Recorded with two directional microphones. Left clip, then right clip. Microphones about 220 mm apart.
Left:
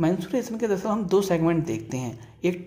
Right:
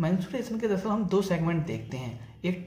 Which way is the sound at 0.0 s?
45° left (ahead or behind).